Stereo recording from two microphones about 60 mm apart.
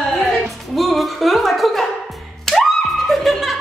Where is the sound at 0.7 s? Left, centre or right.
Centre.